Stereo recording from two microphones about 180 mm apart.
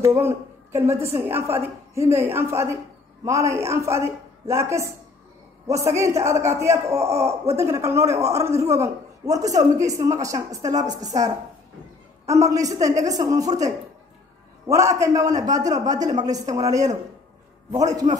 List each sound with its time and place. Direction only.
0.0 s a woman's voice: 15° right (ahead or behind)
12.3 s a woman's voice: 15° right (ahead or behind)
14.7 s a woman's voice: 15° right (ahead or behind)